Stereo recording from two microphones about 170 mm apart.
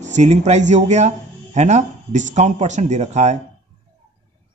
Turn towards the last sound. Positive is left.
turn(degrees=-40)  # may be behind; listen again after turning